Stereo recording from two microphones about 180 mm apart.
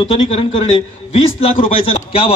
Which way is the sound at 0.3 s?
30° left (ahead or behind).